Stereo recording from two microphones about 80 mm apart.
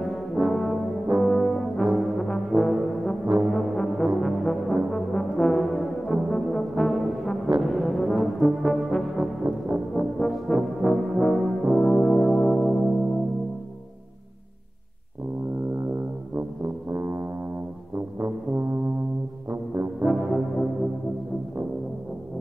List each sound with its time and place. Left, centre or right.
0.0 s brass instrument: centre
16.3 s brass instrument: right
19.5 s brass instrument: right
20.1 s brass instrument: centre